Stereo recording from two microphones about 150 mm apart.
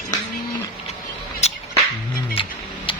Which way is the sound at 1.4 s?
45° left (ahead or behind).